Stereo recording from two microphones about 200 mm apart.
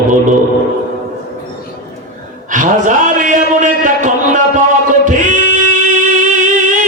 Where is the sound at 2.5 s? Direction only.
40° right (ahead or behind).